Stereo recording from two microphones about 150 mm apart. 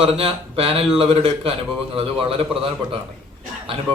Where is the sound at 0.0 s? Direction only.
40° right (ahead or behind).